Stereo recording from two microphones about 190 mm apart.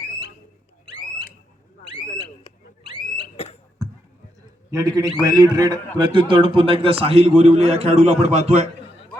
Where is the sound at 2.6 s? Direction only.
50° left (ahead or behind).